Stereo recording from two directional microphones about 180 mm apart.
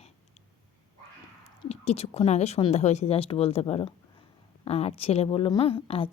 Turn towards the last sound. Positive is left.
turn(degrees=30)  # may be behind; listen again after turning